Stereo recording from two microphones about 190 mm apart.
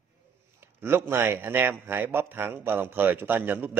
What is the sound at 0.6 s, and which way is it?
A man's voice, 10° right (ahead or behind).